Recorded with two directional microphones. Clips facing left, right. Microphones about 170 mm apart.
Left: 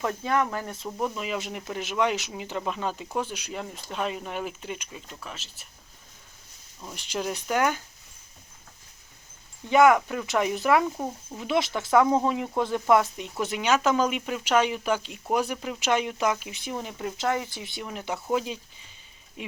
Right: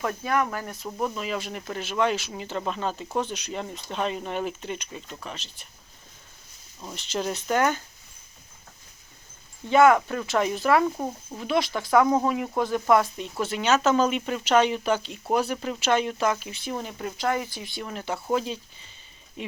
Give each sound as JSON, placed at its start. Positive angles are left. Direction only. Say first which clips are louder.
{"t": 0.2, "sound": "speech", "louder": "even", "side_deg": 20}
{"t": 6.9, "sound": "speech", "louder": "right 2 dB", "side_deg": 10}
{"t": 9.6, "sound": "speech", "louder": "right 1 dB", "side_deg": 15}
{"t": 10.8, "sound": "speech", "louder": "right 2 dB", "side_deg": 0}
{"t": 11.3, "sound": "speech", "louder": "right 1 dB", "side_deg": 20}